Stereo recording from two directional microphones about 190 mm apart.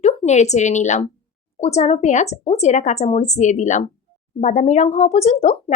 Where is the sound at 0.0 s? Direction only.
35° left (ahead or behind).